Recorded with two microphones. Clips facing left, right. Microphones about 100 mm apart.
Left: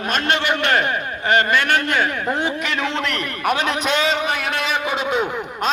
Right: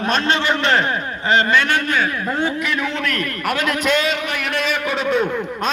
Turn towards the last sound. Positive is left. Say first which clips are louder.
# right 1 dB
turn(degrees=15)  # may be behind; listen again after turning